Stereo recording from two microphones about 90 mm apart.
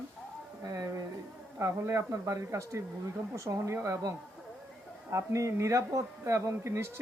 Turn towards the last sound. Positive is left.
turn(degrees=-30)  # may be behind; listen again after turning